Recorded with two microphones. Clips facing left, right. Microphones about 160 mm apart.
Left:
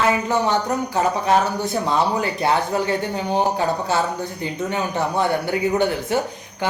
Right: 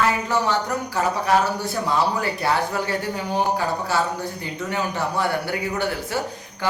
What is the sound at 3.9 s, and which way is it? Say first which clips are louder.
Speech: left 1 dB; 20° left (ahead or behind).